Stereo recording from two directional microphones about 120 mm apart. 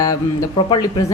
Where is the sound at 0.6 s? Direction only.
40° left (ahead or behind).